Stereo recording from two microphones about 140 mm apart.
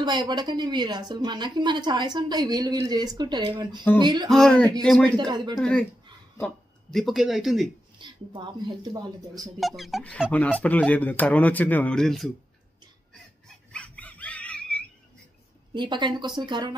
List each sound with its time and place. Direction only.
0.0 s a woman's voice: 30° right (ahead or behind)
4.3 s speech: 5° left (ahead or behind)
5.1 s a woman's voice: 30° right (ahead or behind)
5.6 s speech: 5° left (ahead or behind)
8.0 s speech: 35° right (ahead or behind)
9.6 s speech: centre (ahead or behind)
10.3 s speech: 10° left (ahead or behind)
13.7 s dog: 10° left (ahead or behind)
15.7 s a woman's voice: 35° right (ahead or behind)